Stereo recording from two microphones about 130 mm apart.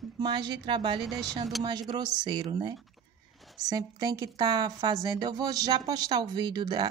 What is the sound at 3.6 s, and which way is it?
A woman's voice, 30° right (ahead or behind).